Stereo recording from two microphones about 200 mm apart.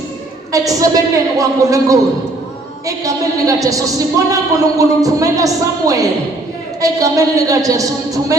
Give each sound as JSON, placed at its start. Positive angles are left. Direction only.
{"t": 0.5, "sound": "a woman's voice", "side_deg": -15}